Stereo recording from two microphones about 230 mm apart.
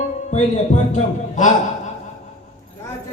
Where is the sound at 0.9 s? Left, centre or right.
Left.